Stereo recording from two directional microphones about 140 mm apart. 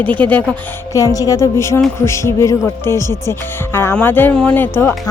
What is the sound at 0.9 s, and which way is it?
A woman's voice, 25° left (ahead or behind).